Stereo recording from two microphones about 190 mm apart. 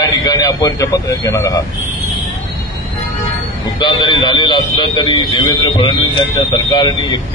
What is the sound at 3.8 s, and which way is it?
A man's voice, 25° left (ahead or behind).